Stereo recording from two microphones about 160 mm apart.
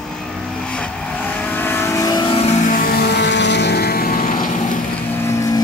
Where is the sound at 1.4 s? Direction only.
10° left (ahead or behind); by 2.4 s 30° left (ahead or behind).